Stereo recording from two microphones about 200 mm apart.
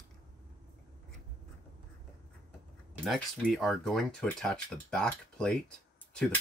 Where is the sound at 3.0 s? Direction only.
Centre (ahead or behind).